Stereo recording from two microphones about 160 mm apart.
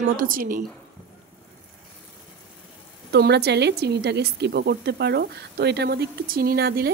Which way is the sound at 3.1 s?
90° right.